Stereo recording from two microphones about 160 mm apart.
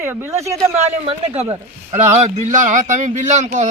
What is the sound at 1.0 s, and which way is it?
A man's voice, 40° right (ahead or behind).